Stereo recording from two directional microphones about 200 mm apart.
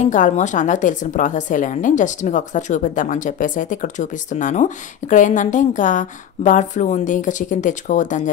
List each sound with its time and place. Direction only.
0.0 s a woman's voice: 40° left (ahead or behind)